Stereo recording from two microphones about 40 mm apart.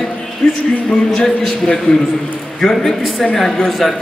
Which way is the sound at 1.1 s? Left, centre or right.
Centre.